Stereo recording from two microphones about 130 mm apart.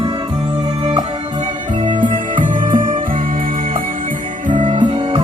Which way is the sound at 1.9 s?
40° right (ahead or behind).